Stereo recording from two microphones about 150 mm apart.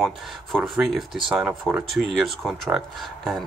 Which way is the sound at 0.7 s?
Centre (ahead or behind).